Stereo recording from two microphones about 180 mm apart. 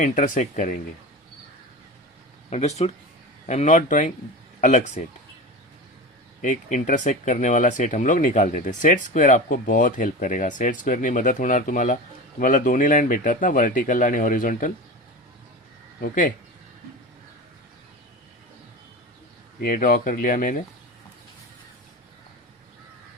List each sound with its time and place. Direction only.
0.0 s speech: 40° left (ahead or behind)
2.5 s speech: 35° left (ahead or behind)
6.4 s speech: 45° left (ahead or behind)
16.0 s speech: 50° left (ahead or behind)
19.5 s speech: 50° left (ahead or behind)